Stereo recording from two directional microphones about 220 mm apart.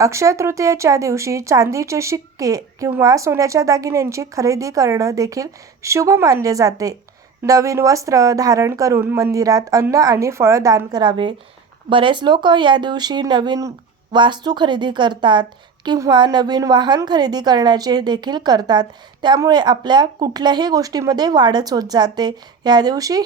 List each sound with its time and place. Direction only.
0.0 s speech: 15° right (ahead or behind)